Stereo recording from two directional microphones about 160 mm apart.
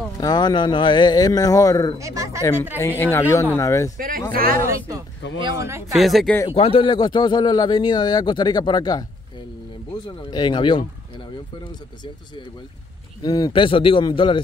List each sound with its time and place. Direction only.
0.2 s a man's voice: 25° left (ahead or behind)
2.0 s speech: 20° right (ahead or behind)
2.8 s a man's voice: 15° left (ahead or behind)
4.3 s a man's voice: 70° right (ahead or behind)
4.6 s speech: 20° right (ahead or behind)
5.9 s speech: centre (ahead or behind)
6.5 s a man's voice: 35° left (ahead or behind)
10.0 s a man's voice: 30° left (ahead or behind)
13.2 s a man's voice: 25° left (ahead or behind)